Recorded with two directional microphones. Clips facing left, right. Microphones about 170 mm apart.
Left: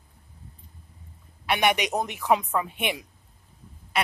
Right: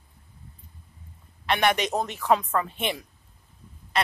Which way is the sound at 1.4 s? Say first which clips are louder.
Even; 10° left (ahead or behind).